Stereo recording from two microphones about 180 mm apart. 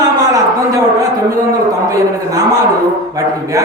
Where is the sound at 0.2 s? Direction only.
20° right (ahead or behind).